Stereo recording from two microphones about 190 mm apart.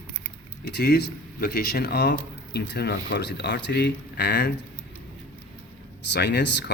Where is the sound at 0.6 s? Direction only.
60° left (ahead or behind).